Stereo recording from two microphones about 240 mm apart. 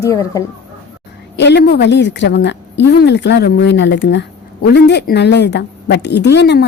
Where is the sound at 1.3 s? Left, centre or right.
Left.